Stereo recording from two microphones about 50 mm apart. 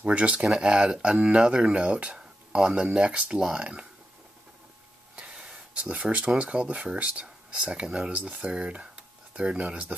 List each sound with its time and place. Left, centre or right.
0.0 s speech: right
5.1 s a sound: centre
6.8 s speech: right